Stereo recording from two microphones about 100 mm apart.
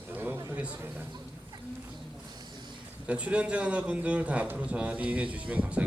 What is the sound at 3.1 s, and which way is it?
A man's voice, 15° right (ahead or behind).